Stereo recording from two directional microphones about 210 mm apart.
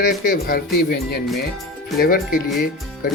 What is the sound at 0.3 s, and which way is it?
Speech, 45° left (ahead or behind).